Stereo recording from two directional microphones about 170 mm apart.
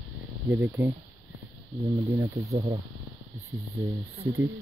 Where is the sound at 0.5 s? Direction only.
10° right (ahead or behind).